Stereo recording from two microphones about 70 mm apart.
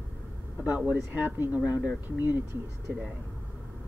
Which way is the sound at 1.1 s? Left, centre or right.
Right.